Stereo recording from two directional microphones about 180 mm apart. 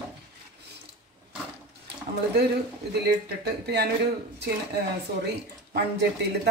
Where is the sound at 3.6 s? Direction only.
65° right (ahead or behind).